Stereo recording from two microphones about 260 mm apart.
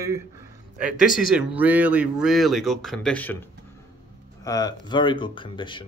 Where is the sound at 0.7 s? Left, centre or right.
Centre.